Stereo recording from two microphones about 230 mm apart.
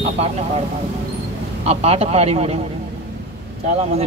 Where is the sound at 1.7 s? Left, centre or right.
Right.